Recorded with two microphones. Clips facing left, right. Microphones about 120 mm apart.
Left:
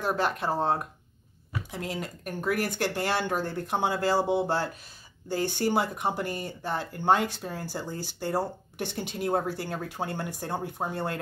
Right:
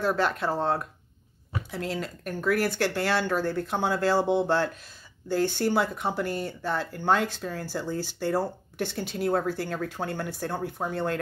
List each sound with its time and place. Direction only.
0.2 s speech: 15° left (ahead or behind)